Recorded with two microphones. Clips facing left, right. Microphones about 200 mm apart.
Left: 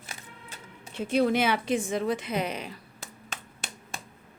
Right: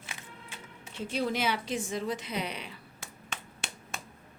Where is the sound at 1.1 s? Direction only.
55° left (ahead or behind); by 3.4 s 40° left (ahead or behind).